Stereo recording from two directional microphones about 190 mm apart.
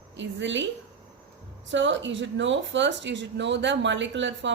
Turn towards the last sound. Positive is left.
turn(degrees=-75)  # may be behind; listen again after turning